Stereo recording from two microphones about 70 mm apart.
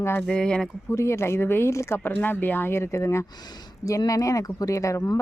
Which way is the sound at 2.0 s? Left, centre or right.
Left.